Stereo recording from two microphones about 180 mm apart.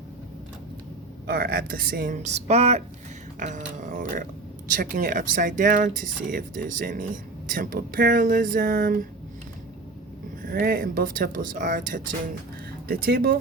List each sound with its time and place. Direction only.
1.3 s speech: 60° right (ahead or behind); by 2.8 s 35° right (ahead or behind)
3.8 s speech: 45° right (ahead or behind)
10.4 s speech: 55° right (ahead or behind)
12.9 s speech: 60° right (ahead or behind)